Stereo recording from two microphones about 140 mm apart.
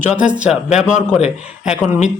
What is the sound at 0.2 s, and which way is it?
Speech, 10° right (ahead or behind).